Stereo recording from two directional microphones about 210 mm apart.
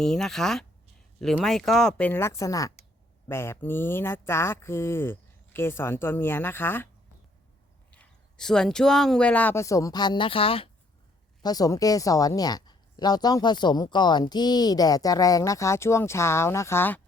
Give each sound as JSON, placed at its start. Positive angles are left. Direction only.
{"t": 0.0, "sound": "a woman's voice", "side_deg": 0}
{"t": 7.9, "sound": "a woman's voice", "side_deg": 5}